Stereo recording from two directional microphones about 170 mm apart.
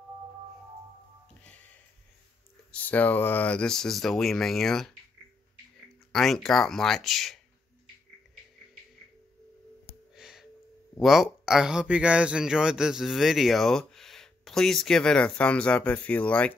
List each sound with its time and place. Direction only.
2.7 s speech: 10° left (ahead or behind)
6.1 s speech: centre (ahead or behind)
9.8 s music: centre (ahead or behind)
11.0 s speech: centre (ahead or behind)